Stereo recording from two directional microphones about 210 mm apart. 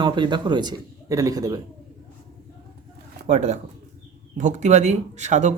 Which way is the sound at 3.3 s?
30° right (ahead or behind).